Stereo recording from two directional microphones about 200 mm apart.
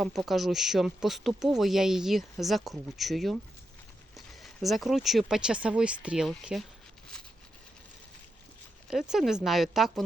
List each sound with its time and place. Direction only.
0.0 s speech: centre (ahead or behind)
8.9 s speech: centre (ahead or behind)